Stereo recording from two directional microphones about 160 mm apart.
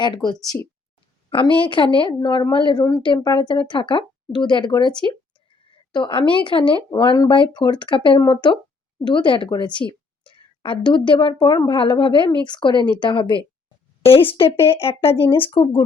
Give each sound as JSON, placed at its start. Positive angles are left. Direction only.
{"t": 1.3, "sound": "a woman's voice", "side_deg": 30}
{"t": 15.1, "sound": "speech", "side_deg": 15}
{"t": 15.5, "sound": "a woman's voice", "side_deg": 30}